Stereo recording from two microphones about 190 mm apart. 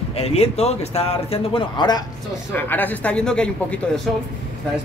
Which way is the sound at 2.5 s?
10° left (ahead or behind).